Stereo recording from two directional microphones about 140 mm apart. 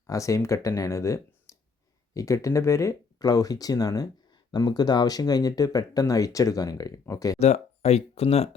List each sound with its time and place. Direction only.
0.1 s speech: 25° left (ahead or behind)
7.3 s speech: 50° left (ahead or behind)